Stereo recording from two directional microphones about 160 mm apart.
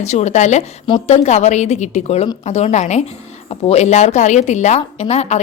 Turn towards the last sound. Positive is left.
turn(degrees=40)  # may be behind; listen again after turning